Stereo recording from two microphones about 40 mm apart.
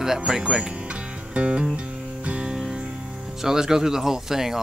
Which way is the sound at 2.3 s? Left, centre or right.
Right.